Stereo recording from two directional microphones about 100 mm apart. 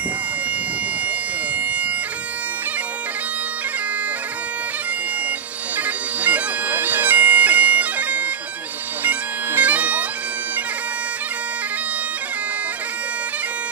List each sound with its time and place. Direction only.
1.6 s bagpipes: 15° right (ahead or behind)
5.8 s bagpipes: 15° right (ahead or behind)